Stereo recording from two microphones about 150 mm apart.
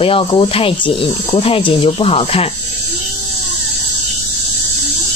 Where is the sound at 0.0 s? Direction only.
35° left (ahead or behind).